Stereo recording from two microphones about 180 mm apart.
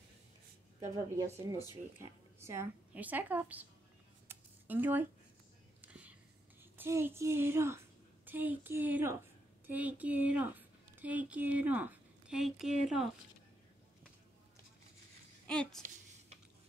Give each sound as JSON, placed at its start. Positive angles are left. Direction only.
{"t": 0.9, "sound": "a woman's voice", "side_deg": -20}
{"t": 4.3, "sound": "a sound", "side_deg": -10}
{"t": 5.8, "sound": "whispering", "side_deg": -10}
{"t": 6.6, "sound": "a child's voice", "side_deg": -15}
{"t": 15.4, "sound": "speech", "side_deg": 5}